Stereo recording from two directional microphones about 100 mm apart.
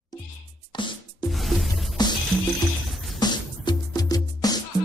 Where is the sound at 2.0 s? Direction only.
45° left (ahead or behind).